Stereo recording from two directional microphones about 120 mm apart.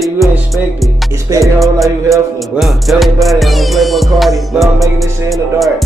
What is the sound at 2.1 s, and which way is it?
Music, centre (ahead or behind).